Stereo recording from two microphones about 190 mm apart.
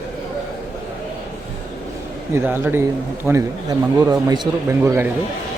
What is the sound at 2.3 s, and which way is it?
Speech, 10° right (ahead or behind).